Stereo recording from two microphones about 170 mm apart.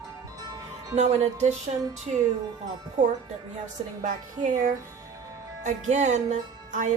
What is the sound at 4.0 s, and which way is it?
A woman's voice, 50° right (ahead or behind).